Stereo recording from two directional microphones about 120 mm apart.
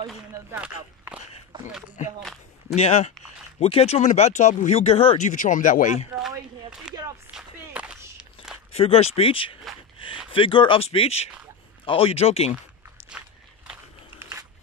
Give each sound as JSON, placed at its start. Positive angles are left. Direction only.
{"t": 0.6, "sound": "speech", "side_deg": -10}
{"t": 2.0, "sound": "speech", "side_deg": 90}
{"t": 2.7, "sound": "speech", "side_deg": 65}
{"t": 5.3, "sound": "speech", "side_deg": 90}
{"t": 6.1, "sound": "a sound", "side_deg": -5}
{"t": 7.3, "sound": "walk", "side_deg": -10}
{"t": 8.7, "sound": "speech", "side_deg": 55}